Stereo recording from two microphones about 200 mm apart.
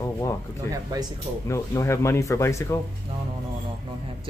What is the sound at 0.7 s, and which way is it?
Speech, 10° left (ahead or behind).